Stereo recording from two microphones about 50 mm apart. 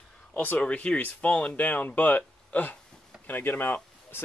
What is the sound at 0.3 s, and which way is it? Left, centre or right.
Speech, left.